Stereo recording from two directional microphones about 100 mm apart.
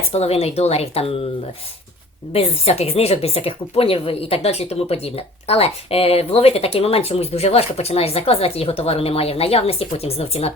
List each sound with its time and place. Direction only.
0.1 s speech: 90° left
2.3 s speech: 85° left